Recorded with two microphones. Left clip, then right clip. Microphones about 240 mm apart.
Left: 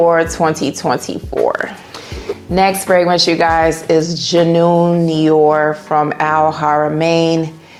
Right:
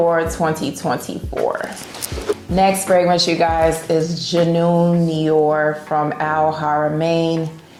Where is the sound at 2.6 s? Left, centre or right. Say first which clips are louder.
Left 3 dB; left.